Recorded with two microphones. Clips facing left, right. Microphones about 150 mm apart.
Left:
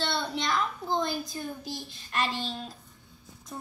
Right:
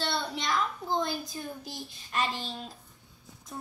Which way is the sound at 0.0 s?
5° right (ahead or behind).